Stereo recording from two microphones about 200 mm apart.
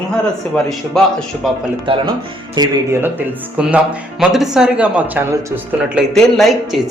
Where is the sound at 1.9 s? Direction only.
25° right (ahead or behind).